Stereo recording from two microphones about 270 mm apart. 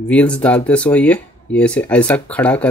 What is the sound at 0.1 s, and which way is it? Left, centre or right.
Speech, centre.